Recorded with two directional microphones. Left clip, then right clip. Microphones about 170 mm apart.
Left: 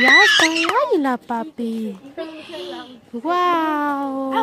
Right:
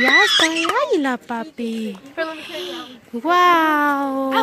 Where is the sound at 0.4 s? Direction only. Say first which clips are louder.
Left 1 dB; centre (ahead or behind).